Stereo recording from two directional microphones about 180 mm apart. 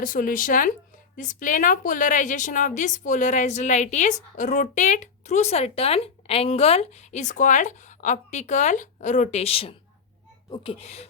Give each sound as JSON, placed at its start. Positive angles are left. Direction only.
{"t": 0.0, "sound": "a woman's voice", "side_deg": 50}